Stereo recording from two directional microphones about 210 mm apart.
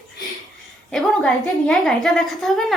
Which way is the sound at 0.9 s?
Centre (ahead or behind).